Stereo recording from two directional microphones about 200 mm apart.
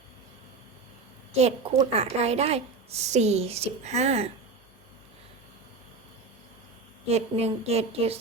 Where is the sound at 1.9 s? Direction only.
30° right (ahead or behind).